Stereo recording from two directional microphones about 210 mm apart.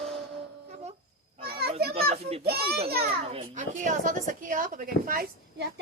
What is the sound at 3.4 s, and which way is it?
A woman's voice, 35° right (ahead or behind).